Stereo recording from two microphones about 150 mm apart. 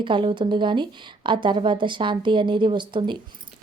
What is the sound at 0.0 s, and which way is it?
A woman's voice, 35° right (ahead or behind).